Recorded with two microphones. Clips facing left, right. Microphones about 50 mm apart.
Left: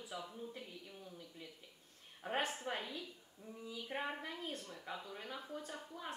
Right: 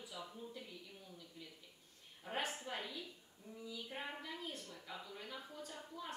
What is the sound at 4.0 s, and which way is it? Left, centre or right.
Speech, left.